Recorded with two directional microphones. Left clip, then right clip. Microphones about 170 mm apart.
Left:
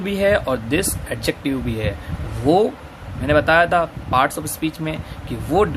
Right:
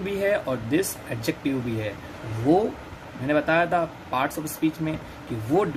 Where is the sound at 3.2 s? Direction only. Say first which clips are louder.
Left 7 dB; 40° left (ahead or behind).